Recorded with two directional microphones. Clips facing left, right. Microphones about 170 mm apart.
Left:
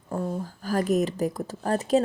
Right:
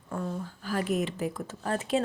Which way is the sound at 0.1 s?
30° left (ahead or behind).